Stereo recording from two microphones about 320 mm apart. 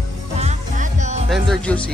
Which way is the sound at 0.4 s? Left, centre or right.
Right.